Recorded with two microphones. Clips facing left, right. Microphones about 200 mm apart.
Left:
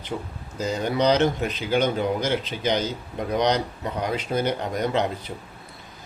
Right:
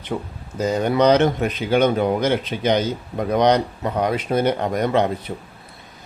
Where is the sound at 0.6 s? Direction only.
55° right (ahead or behind).